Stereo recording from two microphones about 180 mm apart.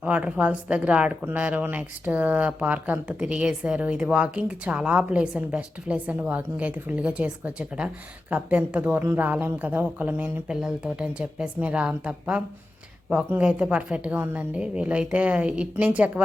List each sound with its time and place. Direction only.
0.0 s a woman's voice: 5° right (ahead or behind)